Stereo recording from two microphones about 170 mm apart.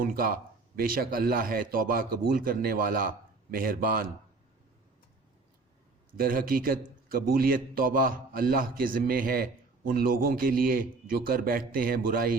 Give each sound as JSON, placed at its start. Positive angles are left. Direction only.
{"t": 0.0, "sound": "a man's voice", "side_deg": -55}
{"t": 6.1, "sound": "a man's voice", "side_deg": -55}